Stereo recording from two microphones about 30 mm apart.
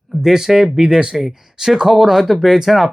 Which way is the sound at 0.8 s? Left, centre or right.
Right.